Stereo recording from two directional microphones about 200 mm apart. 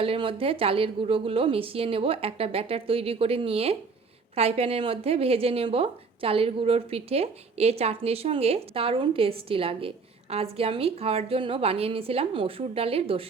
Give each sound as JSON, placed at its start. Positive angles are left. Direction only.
{"t": 0.0, "sound": "a woman's voice", "side_deg": -25}